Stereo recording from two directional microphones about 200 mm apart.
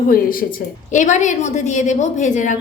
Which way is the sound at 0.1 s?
45° left (ahead or behind).